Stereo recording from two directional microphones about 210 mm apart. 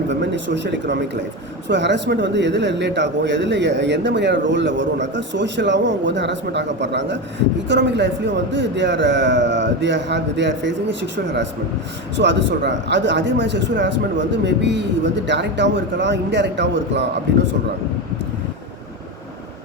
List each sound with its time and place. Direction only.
0.1 s speech: 60° right (ahead or behind)